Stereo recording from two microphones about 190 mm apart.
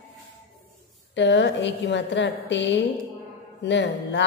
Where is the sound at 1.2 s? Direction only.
70° left (ahead or behind).